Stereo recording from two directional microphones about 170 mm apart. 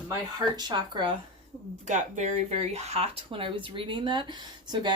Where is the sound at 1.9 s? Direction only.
45° right (ahead or behind).